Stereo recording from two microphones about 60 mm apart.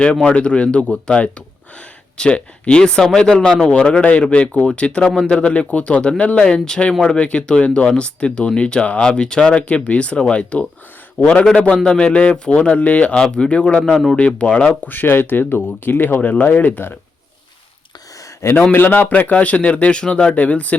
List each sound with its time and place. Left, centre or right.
0.0 s speech: centre
14.2 s speech: centre
14.8 s speech: left
18.7 s speech: left